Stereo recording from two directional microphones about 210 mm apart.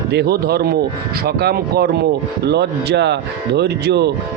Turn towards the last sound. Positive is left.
turn(degrees=-55)  # may be behind; listen again after turning